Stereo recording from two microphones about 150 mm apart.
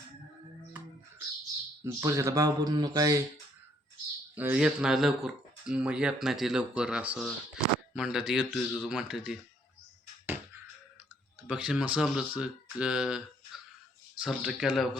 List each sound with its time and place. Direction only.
1.8 s speech: 20° right (ahead or behind)
4.4 s speech: 10° right (ahead or behind)
11.4 s speech: 5° right (ahead or behind)